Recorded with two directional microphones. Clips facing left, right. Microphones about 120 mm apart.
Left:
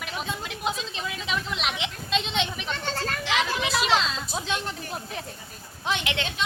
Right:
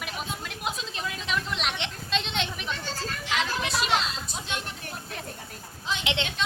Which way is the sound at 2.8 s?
65° left (ahead or behind).